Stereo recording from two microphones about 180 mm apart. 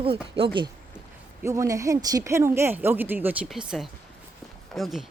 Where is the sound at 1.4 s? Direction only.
15° right (ahead or behind); by 5.0 s centre (ahead or behind).